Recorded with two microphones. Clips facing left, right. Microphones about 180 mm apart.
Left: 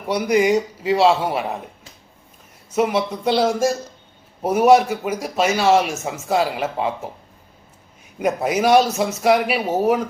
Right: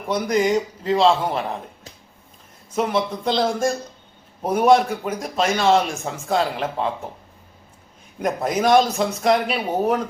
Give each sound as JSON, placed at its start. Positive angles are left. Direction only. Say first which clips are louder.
{"t": 0.1, "sound": "speech", "louder": "left 2 dB", "side_deg": 10}
{"t": 2.7, "sound": "speech", "louder": "left 2 dB", "side_deg": 10}
{"t": 8.2, "sound": "speech", "louder": "left 2 dB", "side_deg": 10}